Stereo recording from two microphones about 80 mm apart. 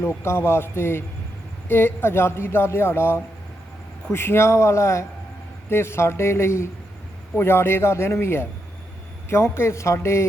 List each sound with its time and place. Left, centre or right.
0.0 s speech: left